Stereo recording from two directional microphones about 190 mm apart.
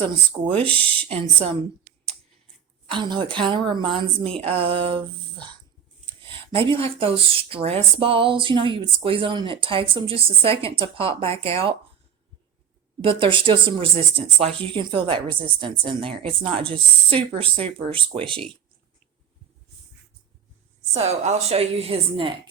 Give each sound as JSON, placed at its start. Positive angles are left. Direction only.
{"t": 0.0, "sound": "speech", "side_deg": -25}
{"t": 0.6, "sound": "speech", "side_deg": 10}
{"t": 1.0, "sound": "a woman's voice", "side_deg": -30}
{"t": 2.9, "sound": "speech", "side_deg": -25}
{"t": 13.0, "sound": "speech", "side_deg": -25}
{"t": 20.9, "sound": "a woman's voice", "side_deg": -35}